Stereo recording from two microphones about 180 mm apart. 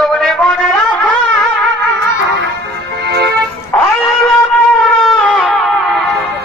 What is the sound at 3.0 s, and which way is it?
Music, 65° right (ahead or behind).